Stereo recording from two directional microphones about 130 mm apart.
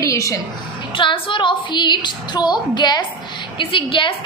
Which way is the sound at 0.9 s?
40° left (ahead or behind).